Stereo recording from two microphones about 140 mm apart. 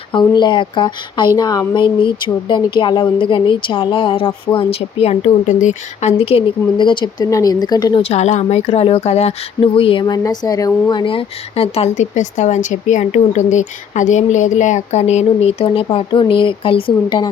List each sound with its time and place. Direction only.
0.1 s a sound: 35° left (ahead or behind)
8.0 s speech: 50° left (ahead or behind)
9.7 s speech: 40° left (ahead or behind)